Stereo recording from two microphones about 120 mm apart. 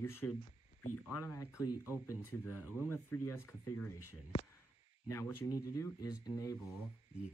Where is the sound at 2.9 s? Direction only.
20° left (ahead or behind).